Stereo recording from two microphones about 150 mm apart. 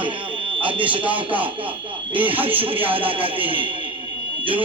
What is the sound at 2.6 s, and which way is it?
Speech, 35° right (ahead or behind).